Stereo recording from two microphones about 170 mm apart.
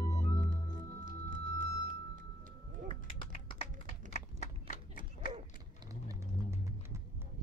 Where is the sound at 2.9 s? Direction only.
30° left (ahead or behind).